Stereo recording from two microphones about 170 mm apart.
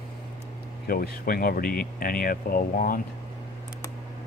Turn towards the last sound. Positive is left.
turn(degrees=55)  # may be behind; listen again after turning